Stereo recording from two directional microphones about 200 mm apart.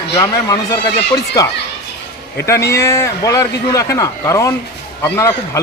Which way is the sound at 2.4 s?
15° left (ahead or behind).